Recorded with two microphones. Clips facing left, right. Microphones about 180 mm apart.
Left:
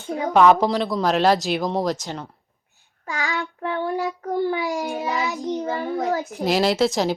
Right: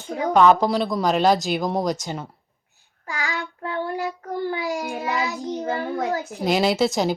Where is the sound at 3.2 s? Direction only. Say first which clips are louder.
Left 2 dB; 20° left (ahead or behind).